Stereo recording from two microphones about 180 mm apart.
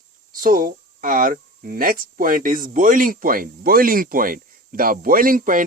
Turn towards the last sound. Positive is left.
turn(degrees=-50)  # may be behind; listen again after turning